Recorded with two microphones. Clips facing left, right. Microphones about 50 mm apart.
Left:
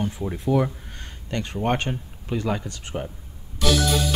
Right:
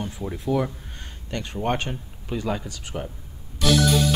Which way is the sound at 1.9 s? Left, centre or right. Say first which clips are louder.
Left 3 dB; centre.